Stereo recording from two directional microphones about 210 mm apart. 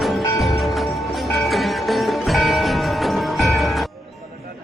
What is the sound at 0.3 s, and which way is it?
Music, centre (ahead or behind).